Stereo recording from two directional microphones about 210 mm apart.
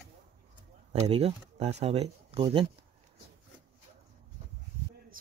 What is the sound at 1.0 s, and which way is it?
Speech, 30° right (ahead or behind).